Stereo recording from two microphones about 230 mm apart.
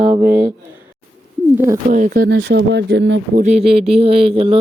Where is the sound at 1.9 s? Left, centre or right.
Right.